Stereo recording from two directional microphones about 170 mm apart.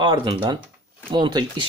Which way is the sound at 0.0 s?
25° right (ahead or behind).